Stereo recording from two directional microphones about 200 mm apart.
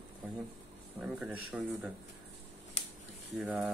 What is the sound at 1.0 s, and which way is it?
Speech, 5° right (ahead or behind).